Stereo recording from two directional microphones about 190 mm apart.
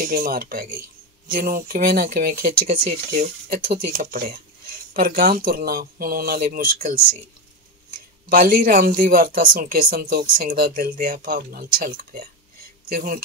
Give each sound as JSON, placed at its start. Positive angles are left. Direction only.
{"t": 0.0, "sound": "speech", "side_deg": -50}
{"t": 8.3, "sound": "speech", "side_deg": -50}